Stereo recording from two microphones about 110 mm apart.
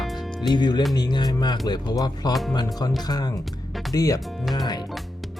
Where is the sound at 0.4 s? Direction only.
40° left (ahead or behind).